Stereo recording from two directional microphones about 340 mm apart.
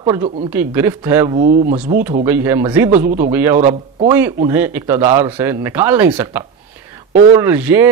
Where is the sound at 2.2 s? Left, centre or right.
Centre.